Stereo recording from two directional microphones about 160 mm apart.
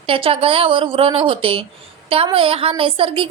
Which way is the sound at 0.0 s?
35° right (ahead or behind).